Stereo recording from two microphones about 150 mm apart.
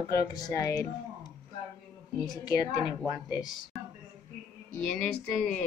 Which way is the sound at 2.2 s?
25° left (ahead or behind).